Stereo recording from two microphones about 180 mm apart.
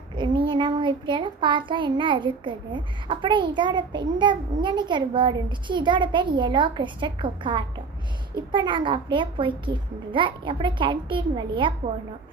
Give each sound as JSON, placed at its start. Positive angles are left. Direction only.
{"t": 0.2, "sound": "child singing", "side_deg": -25}